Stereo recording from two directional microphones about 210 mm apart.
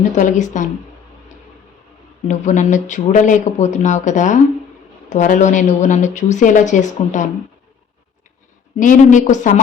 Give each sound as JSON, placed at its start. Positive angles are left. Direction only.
{"t": 0.2, "sound": "a woman's voice", "side_deg": 35}
{"t": 2.2, "sound": "a woman's voice", "side_deg": 35}
{"t": 8.8, "sound": "a woman's voice", "side_deg": 35}